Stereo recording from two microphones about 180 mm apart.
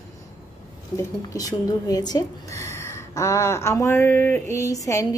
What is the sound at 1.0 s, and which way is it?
Speech, 20° left (ahead or behind).